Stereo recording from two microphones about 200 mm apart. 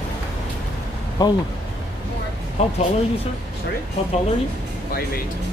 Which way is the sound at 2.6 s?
30° left (ahead or behind).